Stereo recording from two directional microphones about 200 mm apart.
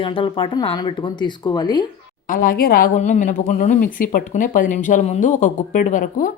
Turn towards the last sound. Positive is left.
turn(degrees=40)  # may be behind; listen again after turning